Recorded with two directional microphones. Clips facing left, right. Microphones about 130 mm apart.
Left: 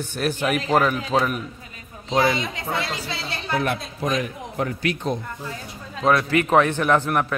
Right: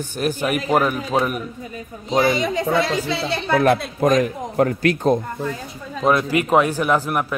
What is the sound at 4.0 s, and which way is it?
Speech, 45° right (ahead or behind).